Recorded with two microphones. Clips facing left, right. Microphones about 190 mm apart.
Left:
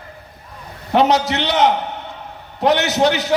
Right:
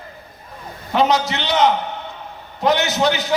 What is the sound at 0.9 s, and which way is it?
A man's voice, 65° left (ahead or behind).